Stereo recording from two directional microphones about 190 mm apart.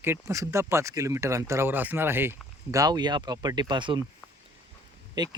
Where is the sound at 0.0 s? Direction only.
15° right (ahead or behind).